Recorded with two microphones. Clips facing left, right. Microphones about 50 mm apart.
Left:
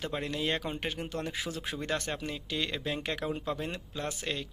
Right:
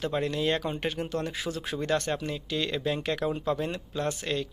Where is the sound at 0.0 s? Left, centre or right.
Centre.